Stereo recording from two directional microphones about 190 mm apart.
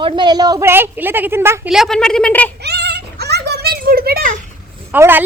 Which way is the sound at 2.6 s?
60° right (ahead or behind).